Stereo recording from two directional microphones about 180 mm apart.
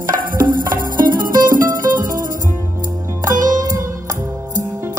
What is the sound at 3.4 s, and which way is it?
Music, 20° right (ahead or behind).